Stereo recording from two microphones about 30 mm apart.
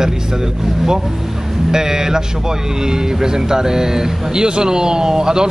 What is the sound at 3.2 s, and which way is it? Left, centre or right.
Speech, right.